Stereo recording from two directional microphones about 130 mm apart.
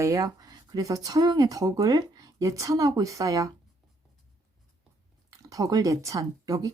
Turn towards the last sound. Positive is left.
turn(degrees=-25)  # may be behind; listen again after turning